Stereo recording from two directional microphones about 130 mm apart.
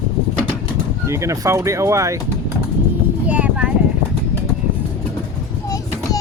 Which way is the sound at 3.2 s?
10° right (ahead or behind).